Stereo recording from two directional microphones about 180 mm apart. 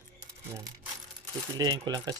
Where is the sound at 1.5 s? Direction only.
20° right (ahead or behind).